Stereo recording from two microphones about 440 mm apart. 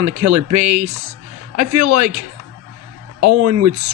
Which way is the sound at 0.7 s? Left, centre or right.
Centre.